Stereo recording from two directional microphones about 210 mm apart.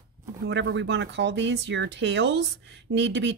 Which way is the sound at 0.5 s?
60° right (ahead or behind).